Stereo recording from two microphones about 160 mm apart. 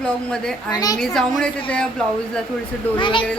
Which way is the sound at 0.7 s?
25° left (ahead or behind).